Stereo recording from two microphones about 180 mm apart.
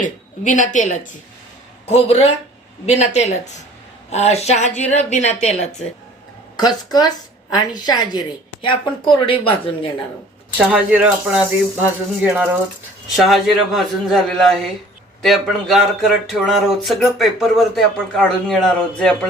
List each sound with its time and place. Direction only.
0.0 s a woman's voice: 45° left (ahead or behind)
1.9 s speech: 35° left (ahead or behind)
6.6 s a woman's voice: 20° left (ahead or behind)
10.6 s speech: 10° right (ahead or behind)